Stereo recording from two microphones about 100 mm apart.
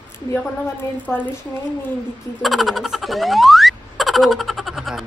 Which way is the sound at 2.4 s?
Centre (ahead or behind).